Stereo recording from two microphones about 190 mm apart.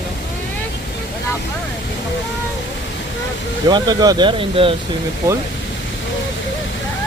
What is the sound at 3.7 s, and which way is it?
Speech, 20° right (ahead or behind).